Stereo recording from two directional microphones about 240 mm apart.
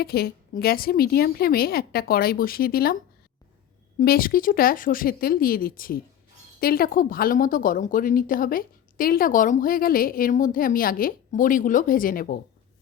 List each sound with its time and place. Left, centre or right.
0.0 s a woman's voice: left
4.0 s a woman's voice: left